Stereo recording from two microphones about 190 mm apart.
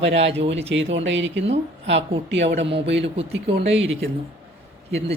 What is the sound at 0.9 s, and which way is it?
A man's voice, 75° right (ahead or behind).